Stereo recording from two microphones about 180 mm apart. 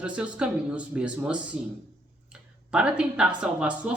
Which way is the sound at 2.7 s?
5° right (ahead or behind).